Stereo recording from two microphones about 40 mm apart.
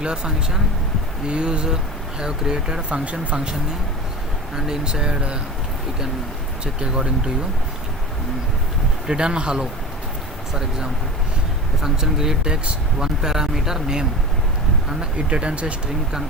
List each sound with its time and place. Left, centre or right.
0.0 s speech: centre
2.9 s speech: right
3.3 s speech: right
6.7 s speech: right
9.0 s speech: right
10.5 s speech: centre
15.3 s speech: right